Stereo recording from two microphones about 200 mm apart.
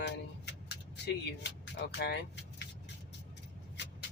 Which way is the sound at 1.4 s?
60° left (ahead or behind).